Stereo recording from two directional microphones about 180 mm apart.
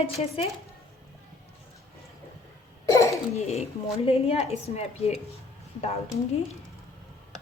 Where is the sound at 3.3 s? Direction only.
35° left (ahead or behind).